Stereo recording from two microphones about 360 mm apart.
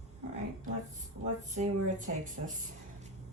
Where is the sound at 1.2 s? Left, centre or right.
Centre.